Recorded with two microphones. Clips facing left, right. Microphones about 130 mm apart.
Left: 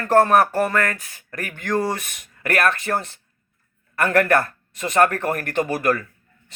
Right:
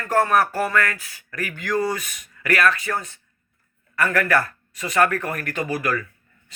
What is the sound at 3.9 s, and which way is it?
Speech, 55° left (ahead or behind).